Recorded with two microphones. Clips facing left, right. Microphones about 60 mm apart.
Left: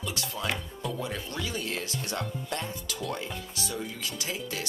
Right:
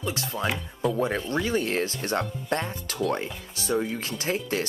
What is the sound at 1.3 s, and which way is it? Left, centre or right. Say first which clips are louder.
Speech: right 8 dB; right.